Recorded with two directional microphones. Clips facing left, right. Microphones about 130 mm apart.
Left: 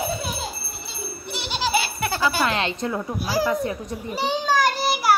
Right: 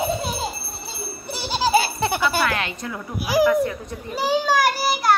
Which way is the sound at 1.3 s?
35° right (ahead or behind).